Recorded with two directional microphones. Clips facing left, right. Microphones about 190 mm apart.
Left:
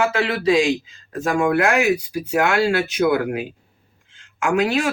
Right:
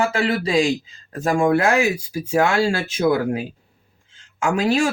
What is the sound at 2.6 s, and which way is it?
Speech, 30° right (ahead or behind).